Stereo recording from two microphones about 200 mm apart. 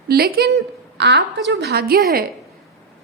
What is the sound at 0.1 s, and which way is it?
A woman's voice, 55° right (ahead or behind).